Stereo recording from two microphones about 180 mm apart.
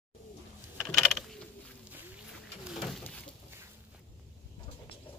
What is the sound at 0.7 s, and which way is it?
Mechanisms, centre (ahead or behind).